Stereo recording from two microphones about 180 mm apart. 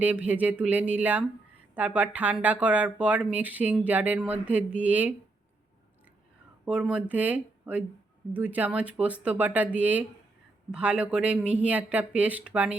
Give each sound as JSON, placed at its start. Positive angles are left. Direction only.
{"t": 0.0, "sound": "speech", "side_deg": -10}
{"t": 6.7, "sound": "speech", "side_deg": -5}